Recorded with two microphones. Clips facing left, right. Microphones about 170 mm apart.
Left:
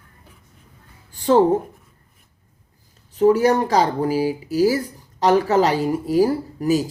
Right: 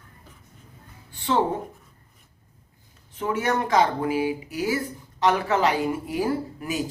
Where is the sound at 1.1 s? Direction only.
45° left (ahead or behind).